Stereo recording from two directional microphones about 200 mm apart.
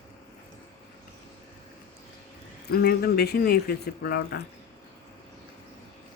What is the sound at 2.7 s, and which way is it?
Speech, 50° left (ahead or behind).